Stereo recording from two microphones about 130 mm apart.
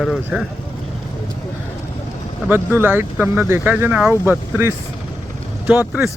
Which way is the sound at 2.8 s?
15° right (ahead or behind).